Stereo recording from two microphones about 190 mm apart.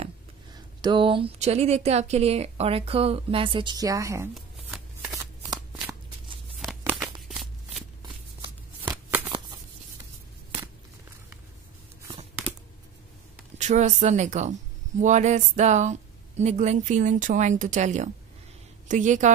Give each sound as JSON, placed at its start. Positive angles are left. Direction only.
{"t": 0.7, "sound": "a woman's voice", "side_deg": -25}
{"t": 5.1, "sound": "shuffling cards", "side_deg": -15}
{"t": 6.8, "sound": "tearing", "side_deg": -10}
{"t": 7.2, "sound": "shuffling cards", "side_deg": 0}
{"t": 13.6, "sound": "a woman's voice", "side_deg": -40}